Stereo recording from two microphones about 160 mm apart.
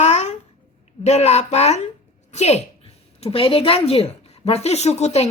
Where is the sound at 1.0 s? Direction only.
45° left (ahead or behind).